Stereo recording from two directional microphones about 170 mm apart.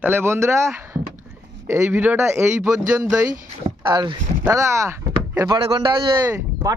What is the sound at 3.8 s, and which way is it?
Speech, 25° right (ahead or behind).